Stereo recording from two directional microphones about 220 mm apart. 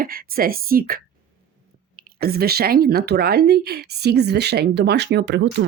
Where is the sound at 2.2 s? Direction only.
45° right (ahead or behind).